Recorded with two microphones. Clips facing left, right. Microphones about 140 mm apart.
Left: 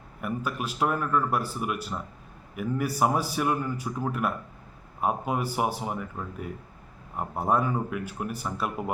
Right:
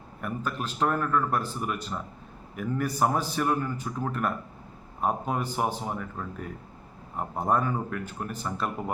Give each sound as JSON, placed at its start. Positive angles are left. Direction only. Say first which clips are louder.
{"t": 0.2, "sound": "a man's voice", "louder": "left 1 dB", "side_deg": 10}